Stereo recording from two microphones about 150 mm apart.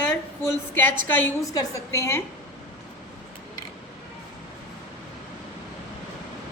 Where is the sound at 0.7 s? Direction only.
15° left (ahead or behind).